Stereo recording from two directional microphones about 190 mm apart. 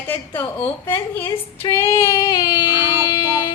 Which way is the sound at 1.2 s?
30° left (ahead or behind).